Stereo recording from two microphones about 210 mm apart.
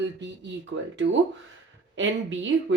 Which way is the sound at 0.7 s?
70° right (ahead or behind).